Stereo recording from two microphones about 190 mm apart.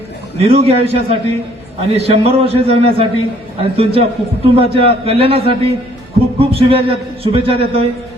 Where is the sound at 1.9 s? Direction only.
30° right (ahead or behind).